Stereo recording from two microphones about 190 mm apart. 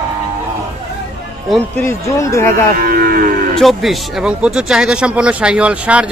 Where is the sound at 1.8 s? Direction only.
15° left (ahead or behind).